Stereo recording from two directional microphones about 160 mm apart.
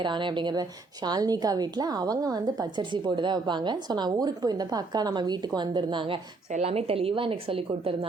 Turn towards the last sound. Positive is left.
turn(degrees=-35)  # may be behind; listen again after turning